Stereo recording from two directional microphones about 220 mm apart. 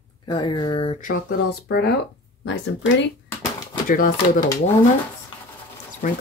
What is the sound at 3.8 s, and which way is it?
Speech, 40° left (ahead or behind).